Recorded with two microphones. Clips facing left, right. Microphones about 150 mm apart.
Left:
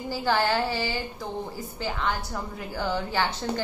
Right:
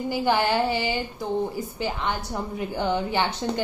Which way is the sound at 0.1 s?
15° right (ahead or behind).